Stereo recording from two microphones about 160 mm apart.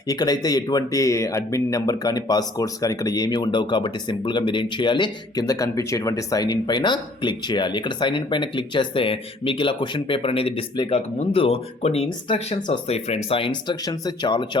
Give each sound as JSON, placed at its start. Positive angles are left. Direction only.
{"t": 0.1, "sound": "speech", "side_deg": 25}